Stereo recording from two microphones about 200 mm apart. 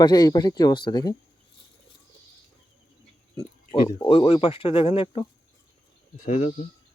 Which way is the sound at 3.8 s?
25° left (ahead or behind).